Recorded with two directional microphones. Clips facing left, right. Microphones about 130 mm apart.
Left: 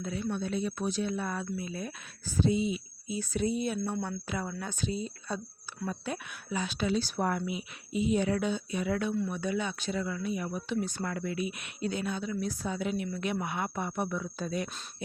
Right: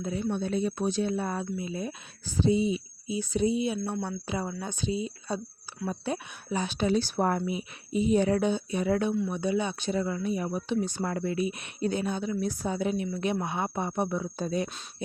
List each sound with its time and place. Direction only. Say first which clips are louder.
0.0 s speech: right 3 dB; 30° right (ahead or behind)
5.9 s speech: right 5 dB; 30° right (ahead or behind)
10.7 s speech: right 3 dB; 25° right (ahead or behind)